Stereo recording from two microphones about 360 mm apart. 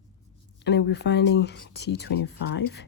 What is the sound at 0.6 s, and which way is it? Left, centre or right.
Speech, left.